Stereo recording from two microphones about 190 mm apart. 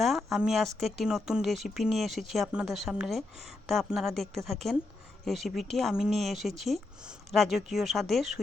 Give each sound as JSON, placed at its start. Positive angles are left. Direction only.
{"t": 0.0, "sound": "a woman's voice", "side_deg": 0}